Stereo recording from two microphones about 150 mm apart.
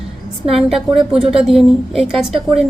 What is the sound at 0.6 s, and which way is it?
A woman's voice, centre (ahead or behind).